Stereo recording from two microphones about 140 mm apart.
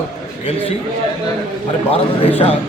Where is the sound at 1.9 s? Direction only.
45° left (ahead or behind).